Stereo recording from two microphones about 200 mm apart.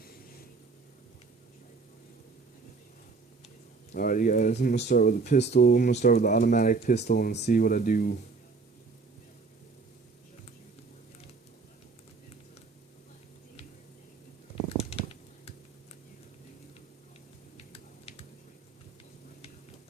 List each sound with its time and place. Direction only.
3.9 s speech: 45° left (ahead or behind)
5.4 s speech: 55° left (ahead or behind)
14.8 s a sound: 30° left (ahead or behind)
17.6 s typing: 30° left (ahead or behind)